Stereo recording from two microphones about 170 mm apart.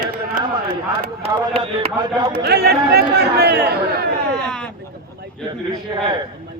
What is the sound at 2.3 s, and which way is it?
Speech, 70° right (ahead or behind).